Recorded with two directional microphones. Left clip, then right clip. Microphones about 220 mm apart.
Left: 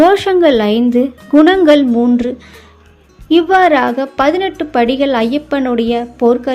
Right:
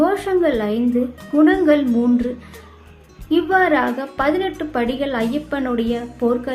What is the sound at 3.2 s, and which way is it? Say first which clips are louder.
A woman's voice: left 7 dB; 30° left (ahead or behind).